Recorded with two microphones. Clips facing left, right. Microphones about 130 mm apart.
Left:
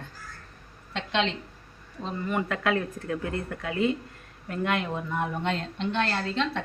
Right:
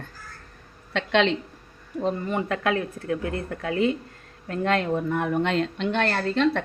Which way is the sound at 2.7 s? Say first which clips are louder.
Right 2 dB; 25° left (ahead or behind).